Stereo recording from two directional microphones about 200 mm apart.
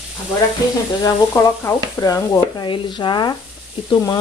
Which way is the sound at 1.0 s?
15° left (ahead or behind).